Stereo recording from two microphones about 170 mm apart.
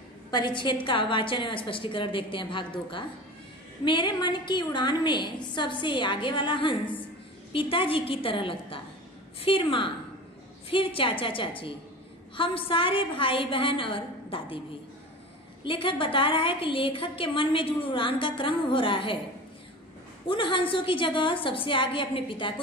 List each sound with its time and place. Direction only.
0.3 s a woman's voice: 25° left (ahead or behind)
15.6 s a woman's voice: 30° left (ahead or behind)
20.2 s a woman's voice: 30° left (ahead or behind)